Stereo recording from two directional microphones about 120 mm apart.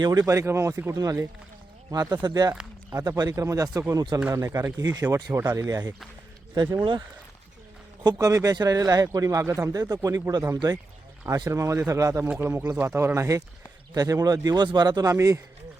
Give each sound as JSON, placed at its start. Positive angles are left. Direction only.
{"t": 0.0, "sound": "a man's voice", "side_deg": -35}
{"t": 8.0, "sound": "a man's voice", "side_deg": -30}